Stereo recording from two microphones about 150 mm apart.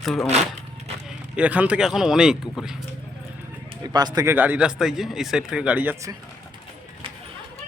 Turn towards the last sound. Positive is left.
turn(degrees=-10)  # may be behind; listen again after turning